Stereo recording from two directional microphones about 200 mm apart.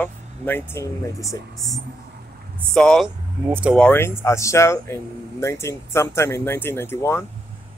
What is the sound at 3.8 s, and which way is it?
Speech, 10° left (ahead or behind).